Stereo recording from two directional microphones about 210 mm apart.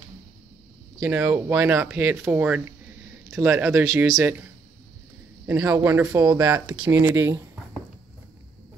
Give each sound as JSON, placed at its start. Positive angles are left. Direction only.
{"t": 0.9, "sound": "speech", "side_deg": -10}
{"t": 5.5, "sound": "speech", "side_deg": -15}
{"t": 6.5, "sound": "speech", "side_deg": -5}